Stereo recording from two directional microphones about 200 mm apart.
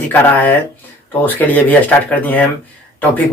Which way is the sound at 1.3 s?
10° left (ahead or behind).